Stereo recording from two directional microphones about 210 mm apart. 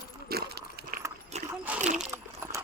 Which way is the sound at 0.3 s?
50° right (ahead or behind).